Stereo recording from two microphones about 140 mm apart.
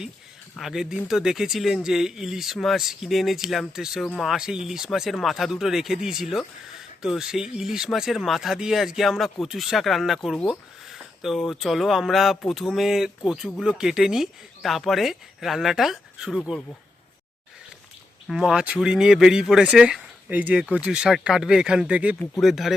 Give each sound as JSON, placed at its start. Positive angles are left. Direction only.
{"t": 0.5, "sound": "speech", "side_deg": 0}
{"t": 18.3, "sound": "speech", "side_deg": 0}